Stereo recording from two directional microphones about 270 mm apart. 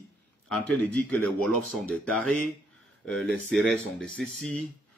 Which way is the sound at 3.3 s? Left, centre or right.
Right.